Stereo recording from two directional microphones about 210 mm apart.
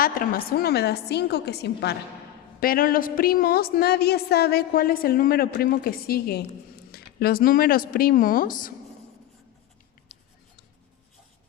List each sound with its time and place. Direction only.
0.0 s a woman's voice: 45° left (ahead or behind)